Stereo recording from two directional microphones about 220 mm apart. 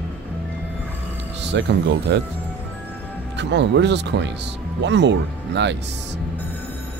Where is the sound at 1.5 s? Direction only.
50° right (ahead or behind).